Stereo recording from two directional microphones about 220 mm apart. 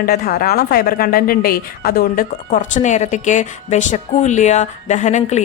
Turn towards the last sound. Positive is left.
turn(degrees=30)  # may be behind; listen again after turning